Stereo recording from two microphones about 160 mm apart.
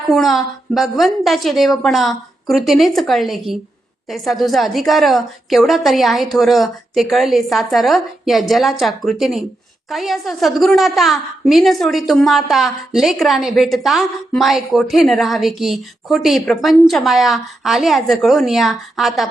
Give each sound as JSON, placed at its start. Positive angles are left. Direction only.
{"t": 0.1, "sound": "a woman's voice", "side_deg": 0}